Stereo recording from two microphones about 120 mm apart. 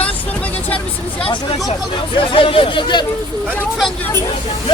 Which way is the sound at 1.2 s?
45° left (ahead or behind).